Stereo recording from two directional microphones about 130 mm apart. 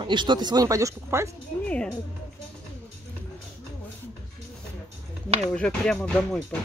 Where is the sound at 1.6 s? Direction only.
10° left (ahead or behind).